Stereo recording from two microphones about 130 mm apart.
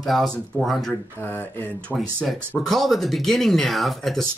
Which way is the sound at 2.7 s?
Centre (ahead or behind).